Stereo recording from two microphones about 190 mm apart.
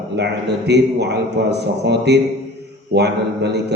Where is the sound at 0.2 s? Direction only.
60° right (ahead or behind).